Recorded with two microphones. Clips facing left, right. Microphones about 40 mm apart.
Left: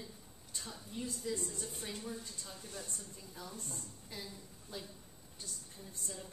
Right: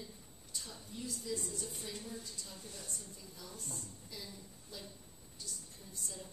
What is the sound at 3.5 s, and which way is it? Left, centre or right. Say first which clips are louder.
Speech: right 2 dB; centre.